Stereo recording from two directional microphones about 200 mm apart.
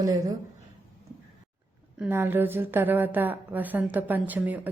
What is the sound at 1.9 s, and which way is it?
A woman's voice, 10° right (ahead or behind).